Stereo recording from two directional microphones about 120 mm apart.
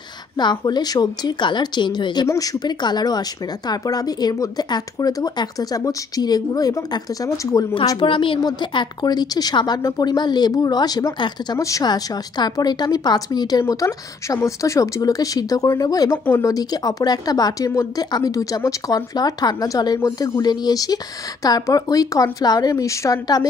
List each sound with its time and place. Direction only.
0.4 s a woman's voice: 35° left (ahead or behind)
8.0 s a woman's voice: 45° left (ahead or behind)
16.3 s speech: 20° left (ahead or behind)
16.5 s a woman's voice: 35° left (ahead or behind)